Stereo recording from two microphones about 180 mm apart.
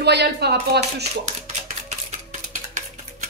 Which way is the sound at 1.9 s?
45° right (ahead or behind).